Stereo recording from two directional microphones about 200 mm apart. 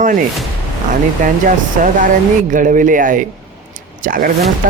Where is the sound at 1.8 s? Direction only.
40° right (ahead or behind).